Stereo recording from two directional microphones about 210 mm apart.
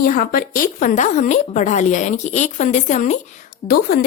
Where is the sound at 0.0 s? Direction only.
45° left (ahead or behind).